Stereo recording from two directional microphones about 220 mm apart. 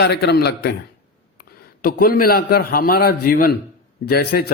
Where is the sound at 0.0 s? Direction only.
50° left (ahead or behind).